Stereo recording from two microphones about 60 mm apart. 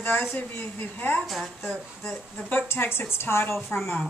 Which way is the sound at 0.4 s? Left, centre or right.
Left.